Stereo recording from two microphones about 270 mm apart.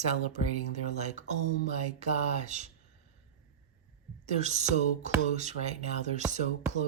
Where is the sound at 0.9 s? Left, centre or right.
Right.